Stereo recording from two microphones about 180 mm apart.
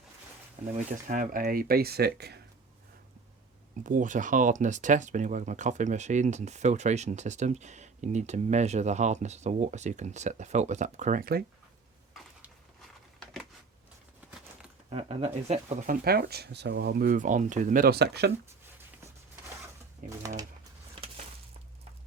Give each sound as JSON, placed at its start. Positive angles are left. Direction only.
{"t": 0.8, "sound": "speech", "side_deg": -45}
{"t": 3.8, "sound": "speech", "side_deg": -45}
{"t": 14.8, "sound": "speech", "side_deg": -35}
{"t": 16.0, "sound": "speech", "side_deg": -60}
{"t": 20.1, "sound": "pigeon", "side_deg": -20}